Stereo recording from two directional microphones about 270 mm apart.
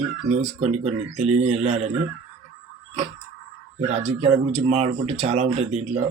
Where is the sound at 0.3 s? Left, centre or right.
Right.